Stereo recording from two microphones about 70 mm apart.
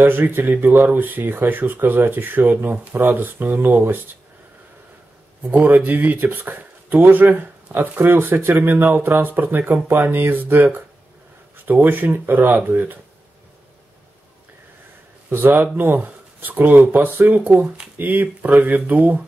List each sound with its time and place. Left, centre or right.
0.0 s speech: right
5.4 s speech: right
15.2 s a man's voice: right